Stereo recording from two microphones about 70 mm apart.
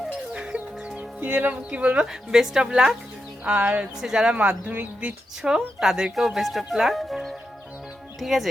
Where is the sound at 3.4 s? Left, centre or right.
Right.